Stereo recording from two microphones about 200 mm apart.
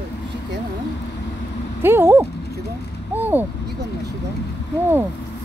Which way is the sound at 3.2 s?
10° right (ahead or behind).